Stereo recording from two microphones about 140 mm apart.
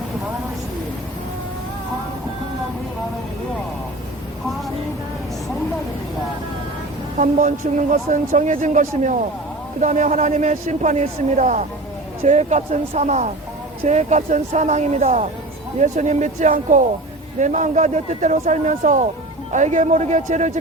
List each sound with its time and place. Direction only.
7.2 s a woman's voice: 65° right (ahead or behind)